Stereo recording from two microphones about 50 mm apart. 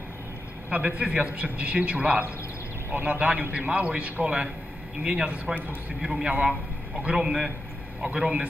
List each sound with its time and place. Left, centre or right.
0.7 s a man's voice: right
2.9 s a man's voice: right
3.2 s a man's voice: right
5.9 s a man's voice: centre
6.2 s a man's voice: right
7.2 s a man's voice: centre
8.0 s a man's voice: right